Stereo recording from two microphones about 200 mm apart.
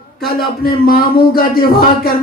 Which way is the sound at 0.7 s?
45° left (ahead or behind).